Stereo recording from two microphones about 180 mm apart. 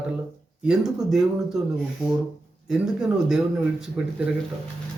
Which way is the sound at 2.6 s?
5° right (ahead or behind).